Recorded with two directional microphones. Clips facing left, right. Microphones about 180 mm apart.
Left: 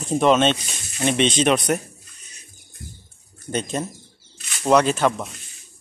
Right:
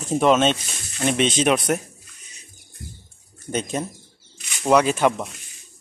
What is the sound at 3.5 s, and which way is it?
Speech, 10° right (ahead or behind).